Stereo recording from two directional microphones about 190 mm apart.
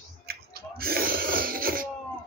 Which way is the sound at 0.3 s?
50° right (ahead or behind).